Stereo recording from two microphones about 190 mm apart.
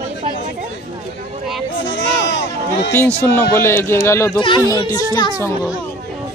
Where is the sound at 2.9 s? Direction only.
10° left (ahead or behind).